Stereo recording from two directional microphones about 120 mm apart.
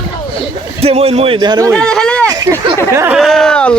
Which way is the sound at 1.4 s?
35° right (ahead or behind).